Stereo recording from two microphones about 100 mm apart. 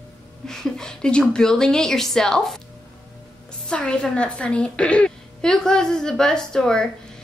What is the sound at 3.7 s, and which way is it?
A woman's voice, 10° left (ahead or behind).